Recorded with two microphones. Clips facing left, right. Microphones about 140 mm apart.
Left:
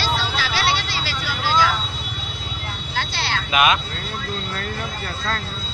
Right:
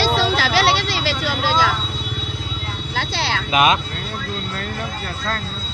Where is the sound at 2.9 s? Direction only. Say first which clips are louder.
Right 3 dB; 90° right.